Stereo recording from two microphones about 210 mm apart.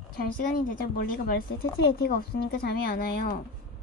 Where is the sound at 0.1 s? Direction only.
40° left (ahead or behind).